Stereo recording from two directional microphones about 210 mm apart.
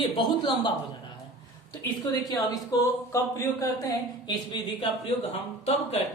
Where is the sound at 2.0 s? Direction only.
20° left (ahead or behind).